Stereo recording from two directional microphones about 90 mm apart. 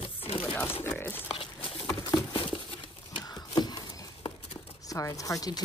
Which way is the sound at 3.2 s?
50° left (ahead or behind).